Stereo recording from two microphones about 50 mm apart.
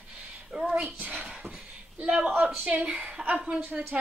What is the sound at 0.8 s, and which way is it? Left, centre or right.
Speech, right.